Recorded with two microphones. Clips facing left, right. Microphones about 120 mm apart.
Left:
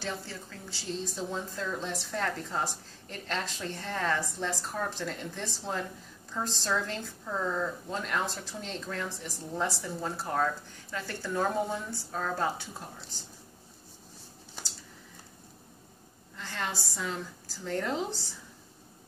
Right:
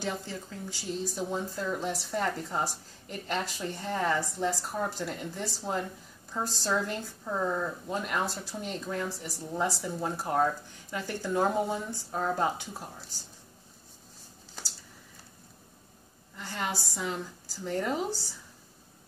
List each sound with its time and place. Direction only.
0.0 s speech: 15° right (ahead or behind)
16.3 s a woman's voice: 10° right (ahead or behind)